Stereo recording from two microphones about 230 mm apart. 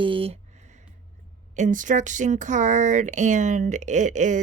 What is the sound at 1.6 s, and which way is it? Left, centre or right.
Speech, right.